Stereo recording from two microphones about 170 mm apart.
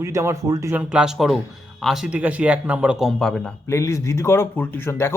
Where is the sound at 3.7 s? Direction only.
15° left (ahead or behind).